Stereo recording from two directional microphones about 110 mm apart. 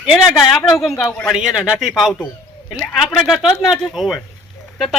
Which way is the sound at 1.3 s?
10° right (ahead or behind).